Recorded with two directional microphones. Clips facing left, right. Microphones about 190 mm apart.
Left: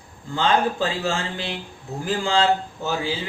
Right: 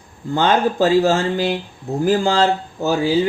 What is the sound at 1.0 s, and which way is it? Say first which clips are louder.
Speech: right 9 dB; 40° right (ahead or behind).